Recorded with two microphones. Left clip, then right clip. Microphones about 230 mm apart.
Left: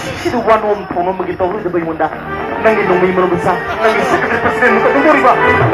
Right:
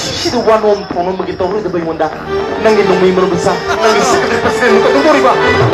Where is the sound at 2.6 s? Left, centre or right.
Right.